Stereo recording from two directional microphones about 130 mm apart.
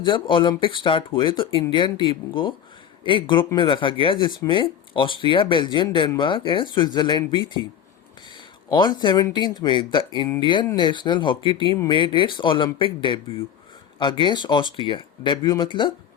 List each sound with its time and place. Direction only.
0.0 s speech: 40° left (ahead or behind)
8.7 s speech: 35° left (ahead or behind)